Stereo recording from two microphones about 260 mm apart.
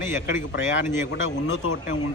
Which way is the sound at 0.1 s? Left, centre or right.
Centre.